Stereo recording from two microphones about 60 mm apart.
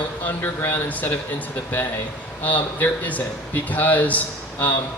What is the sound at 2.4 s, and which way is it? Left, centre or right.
Speech, left.